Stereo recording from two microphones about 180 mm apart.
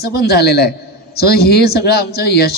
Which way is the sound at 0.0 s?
65° left (ahead or behind).